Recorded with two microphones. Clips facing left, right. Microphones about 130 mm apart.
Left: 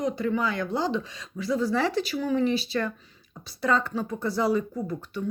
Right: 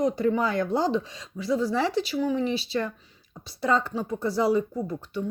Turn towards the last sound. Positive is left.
turn(degrees=-30)  # may be behind; listen again after turning